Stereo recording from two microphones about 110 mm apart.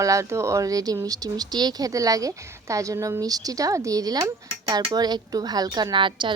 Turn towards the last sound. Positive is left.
turn(degrees=-50)  # may be behind; listen again after turning